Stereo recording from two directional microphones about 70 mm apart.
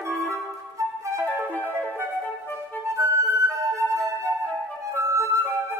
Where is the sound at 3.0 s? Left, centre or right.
Right.